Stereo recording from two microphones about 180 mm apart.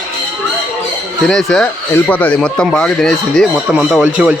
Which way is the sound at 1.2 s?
Centre (ahead or behind).